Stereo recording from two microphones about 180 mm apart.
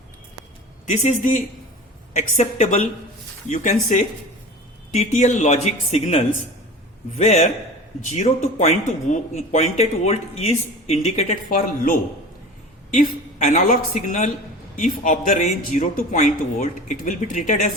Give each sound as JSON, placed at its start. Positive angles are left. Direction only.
{"t": 0.9, "sound": "a man's voice", "side_deg": 40}
{"t": 11.5, "sound": "speech", "side_deg": 50}
{"t": 13.5, "sound": "speech", "side_deg": 45}